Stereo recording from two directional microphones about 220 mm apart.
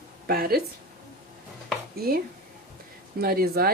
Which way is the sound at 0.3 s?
40° right (ahead or behind).